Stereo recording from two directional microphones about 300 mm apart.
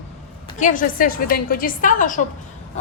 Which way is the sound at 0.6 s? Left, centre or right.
Left.